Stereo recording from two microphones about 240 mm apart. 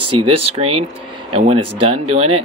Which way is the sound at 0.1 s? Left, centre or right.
Right.